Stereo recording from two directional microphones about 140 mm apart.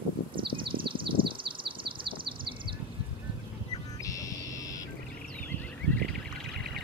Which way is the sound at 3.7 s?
25° left (ahead or behind).